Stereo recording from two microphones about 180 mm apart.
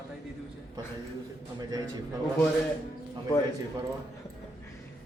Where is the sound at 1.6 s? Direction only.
20° right (ahead or behind).